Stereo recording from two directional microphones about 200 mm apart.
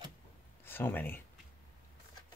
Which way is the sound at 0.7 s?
10° left (ahead or behind).